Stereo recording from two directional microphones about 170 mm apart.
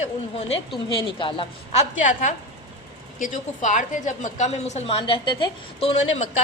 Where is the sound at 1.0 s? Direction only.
30° left (ahead or behind).